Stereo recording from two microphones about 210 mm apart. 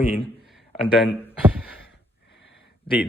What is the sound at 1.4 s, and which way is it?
Speech, 5° right (ahead or behind).